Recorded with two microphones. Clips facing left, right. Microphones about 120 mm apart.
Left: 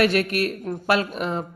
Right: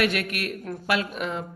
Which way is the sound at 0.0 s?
35° left (ahead or behind).